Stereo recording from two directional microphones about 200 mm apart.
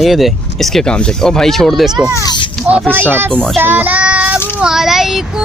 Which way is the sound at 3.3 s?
5° left (ahead or behind).